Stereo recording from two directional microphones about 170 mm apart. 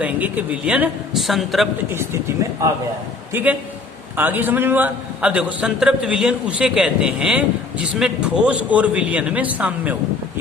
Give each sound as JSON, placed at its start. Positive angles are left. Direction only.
{"t": 0.0, "sound": "a man's voice", "side_deg": -10}
{"t": 3.3, "sound": "a man's voice", "side_deg": -10}